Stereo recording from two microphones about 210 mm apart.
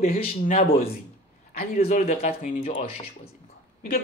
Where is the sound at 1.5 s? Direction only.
40° left (ahead or behind).